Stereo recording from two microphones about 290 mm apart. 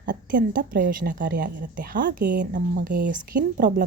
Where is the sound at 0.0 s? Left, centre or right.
Right.